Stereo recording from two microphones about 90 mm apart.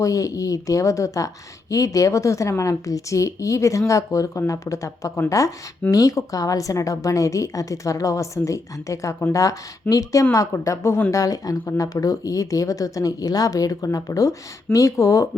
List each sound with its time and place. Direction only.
0.0 s speech: 40° left (ahead or behind)